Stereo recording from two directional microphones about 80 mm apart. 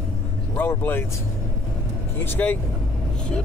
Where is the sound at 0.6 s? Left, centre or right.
Left.